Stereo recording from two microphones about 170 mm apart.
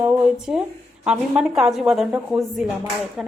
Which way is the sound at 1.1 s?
5° right (ahead or behind).